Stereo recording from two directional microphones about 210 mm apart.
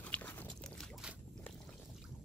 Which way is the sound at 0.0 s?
5° left (ahead or behind).